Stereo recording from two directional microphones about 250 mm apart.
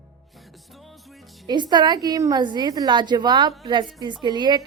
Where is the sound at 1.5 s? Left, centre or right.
Centre.